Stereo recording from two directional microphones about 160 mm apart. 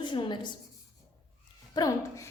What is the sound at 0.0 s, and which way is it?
Speech, 30° left (ahead or behind).